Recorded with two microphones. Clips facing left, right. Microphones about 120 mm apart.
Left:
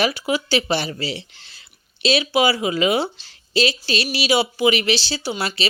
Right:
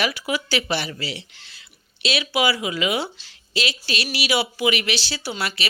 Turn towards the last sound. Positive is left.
turn(degrees=25)  # may be behind; listen again after turning